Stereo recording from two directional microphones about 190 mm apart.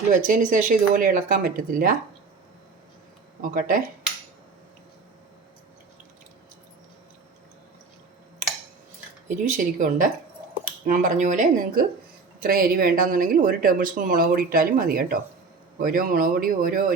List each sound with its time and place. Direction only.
0.1 s speech: 45° right (ahead or behind)
3.4 s speech: 50° right (ahead or behind)
9.3 s speech: 40° right (ahead or behind)